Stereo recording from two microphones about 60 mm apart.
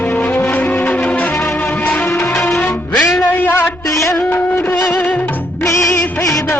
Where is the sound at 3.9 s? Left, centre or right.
Left.